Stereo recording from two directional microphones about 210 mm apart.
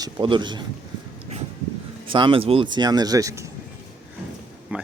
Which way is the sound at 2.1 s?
25° right (ahead or behind).